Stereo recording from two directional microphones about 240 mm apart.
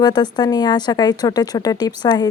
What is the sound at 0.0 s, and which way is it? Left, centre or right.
A woman's voice, centre.